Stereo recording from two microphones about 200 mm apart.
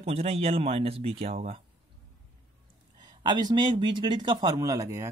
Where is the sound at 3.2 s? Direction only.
20° right (ahead or behind).